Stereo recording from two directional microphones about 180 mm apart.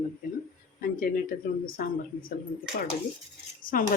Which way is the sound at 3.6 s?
50° left (ahead or behind).